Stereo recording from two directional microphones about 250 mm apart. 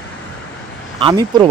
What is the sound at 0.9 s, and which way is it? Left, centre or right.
Speech, centre.